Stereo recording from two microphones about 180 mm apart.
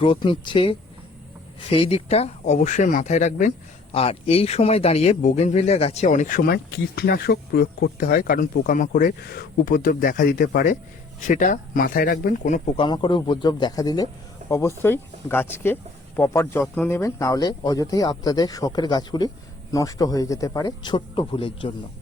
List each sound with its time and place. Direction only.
0.0 s speech: 30° left (ahead or behind)
3.9 s speech: 30° left (ahead or behind); by 12.6 s 45° left (ahead or behind)
12.7 s speech: 30° left (ahead or behind)